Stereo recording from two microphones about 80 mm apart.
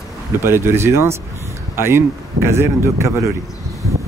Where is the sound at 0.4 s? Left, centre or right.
Right.